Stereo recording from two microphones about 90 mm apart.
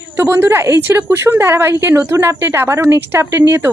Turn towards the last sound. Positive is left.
turn(degrees=-30)  # may be behind; listen again after turning